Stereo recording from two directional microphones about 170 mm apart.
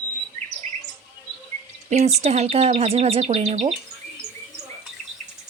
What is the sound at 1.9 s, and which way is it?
Speech, 40° right (ahead or behind).